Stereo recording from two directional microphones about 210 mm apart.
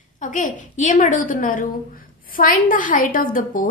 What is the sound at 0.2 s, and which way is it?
A woman's voice, 35° left (ahead or behind).